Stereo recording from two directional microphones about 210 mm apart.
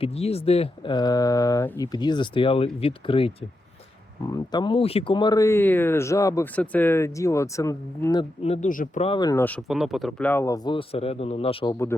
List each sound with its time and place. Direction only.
0.0 s speech: 30° left (ahead or behind)
4.5 s speech: 25° left (ahead or behind)
8.6 s speech: 40° left (ahead or behind)
9.0 s speech: 20° left (ahead or behind)
9.6 s speech: centre (ahead or behind); by 11.9 s 25° left (ahead or behind)